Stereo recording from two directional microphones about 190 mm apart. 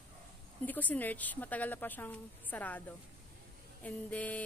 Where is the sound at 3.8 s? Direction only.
10° left (ahead or behind).